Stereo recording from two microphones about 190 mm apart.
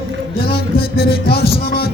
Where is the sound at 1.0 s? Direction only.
55° left (ahead or behind).